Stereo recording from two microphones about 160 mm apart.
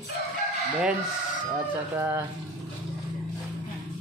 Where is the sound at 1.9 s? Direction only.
10° right (ahead or behind).